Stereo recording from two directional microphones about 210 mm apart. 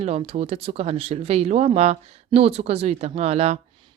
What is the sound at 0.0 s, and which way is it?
Speech, 30° right (ahead or behind).